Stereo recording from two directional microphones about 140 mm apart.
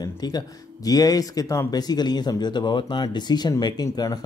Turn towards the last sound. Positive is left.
turn(degrees=25)  # may be behind; listen again after turning